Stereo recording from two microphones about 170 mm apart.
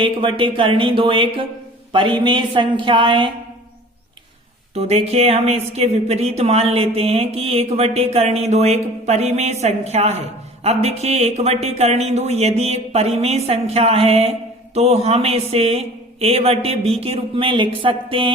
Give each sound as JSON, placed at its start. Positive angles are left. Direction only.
{"t": 0.0, "sound": "a woman's voice", "side_deg": -30}
{"t": 4.7, "sound": "speech", "side_deg": -40}